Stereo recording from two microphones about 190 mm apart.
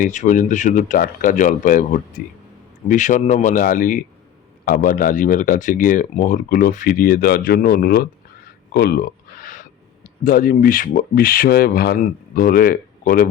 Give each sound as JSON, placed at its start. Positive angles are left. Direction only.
{"t": 0.0, "sound": "speech", "side_deg": 40}
{"t": 8.7, "sound": "a sound", "side_deg": 55}
{"t": 10.2, "sound": "speech", "side_deg": 50}